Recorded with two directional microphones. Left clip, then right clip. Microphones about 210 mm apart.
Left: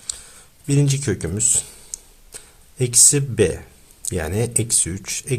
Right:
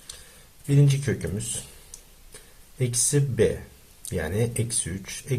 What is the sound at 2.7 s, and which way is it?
Speech, 45° left (ahead or behind).